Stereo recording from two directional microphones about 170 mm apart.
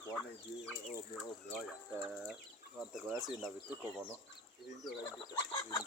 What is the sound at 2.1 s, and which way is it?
Speech, 5° right (ahead or behind).